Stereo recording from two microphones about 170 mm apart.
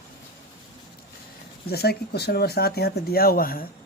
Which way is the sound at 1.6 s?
70° left (ahead or behind).